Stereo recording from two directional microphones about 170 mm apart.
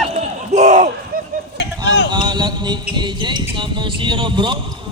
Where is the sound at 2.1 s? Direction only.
25° right (ahead or behind).